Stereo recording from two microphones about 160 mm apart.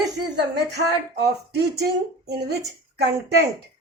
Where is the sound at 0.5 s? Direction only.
90° right.